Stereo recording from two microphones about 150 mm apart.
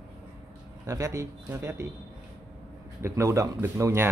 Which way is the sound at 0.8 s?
20° right (ahead or behind).